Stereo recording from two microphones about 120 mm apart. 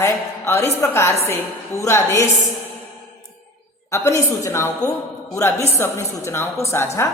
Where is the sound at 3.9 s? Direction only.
25° left (ahead or behind).